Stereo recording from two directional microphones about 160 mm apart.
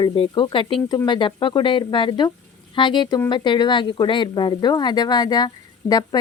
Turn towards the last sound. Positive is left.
turn(degrees=25)  # may be behind; listen again after turning